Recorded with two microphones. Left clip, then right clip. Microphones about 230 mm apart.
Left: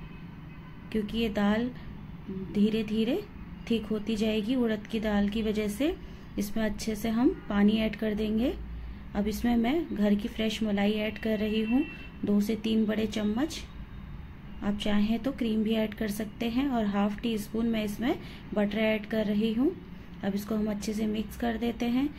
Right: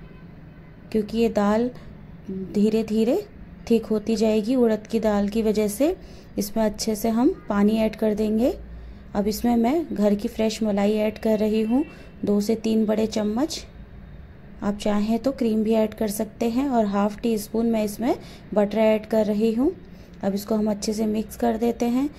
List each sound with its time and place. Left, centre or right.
0.9 s a woman's voice: right